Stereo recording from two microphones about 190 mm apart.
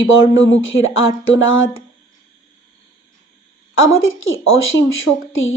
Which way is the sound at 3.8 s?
90° left.